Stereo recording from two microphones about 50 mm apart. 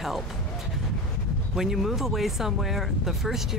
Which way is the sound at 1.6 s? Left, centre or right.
Centre.